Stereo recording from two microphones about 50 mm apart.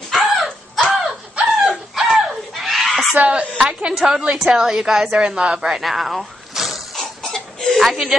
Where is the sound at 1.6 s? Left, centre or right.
Centre.